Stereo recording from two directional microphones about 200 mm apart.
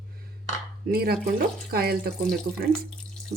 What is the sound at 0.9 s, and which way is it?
A woman's voice, 50° right (ahead or behind).